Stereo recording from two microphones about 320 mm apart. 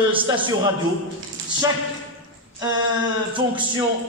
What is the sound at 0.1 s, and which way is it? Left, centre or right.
Speech, centre.